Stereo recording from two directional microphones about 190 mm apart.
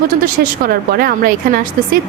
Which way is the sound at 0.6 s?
50° right (ahead or behind).